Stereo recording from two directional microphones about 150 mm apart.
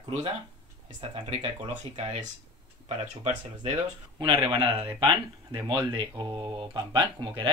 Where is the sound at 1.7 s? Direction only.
55° right (ahead or behind).